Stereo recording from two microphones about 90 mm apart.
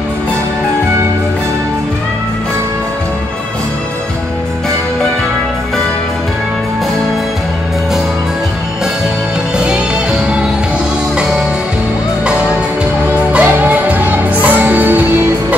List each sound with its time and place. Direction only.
13.3 s music: 20° right (ahead or behind)